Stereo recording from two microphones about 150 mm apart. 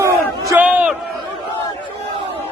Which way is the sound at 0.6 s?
10° right (ahead or behind).